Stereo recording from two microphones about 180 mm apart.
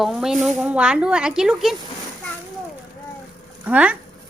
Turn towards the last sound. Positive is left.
turn(degrees=-10)  # may be behind; listen again after turning